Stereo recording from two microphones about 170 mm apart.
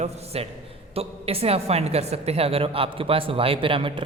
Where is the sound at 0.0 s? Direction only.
40° right (ahead or behind).